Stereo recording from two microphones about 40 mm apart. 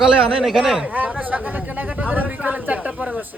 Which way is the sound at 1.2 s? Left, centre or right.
Right.